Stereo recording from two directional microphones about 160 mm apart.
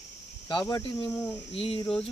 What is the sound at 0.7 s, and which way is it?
Speech, 25° left (ahead or behind).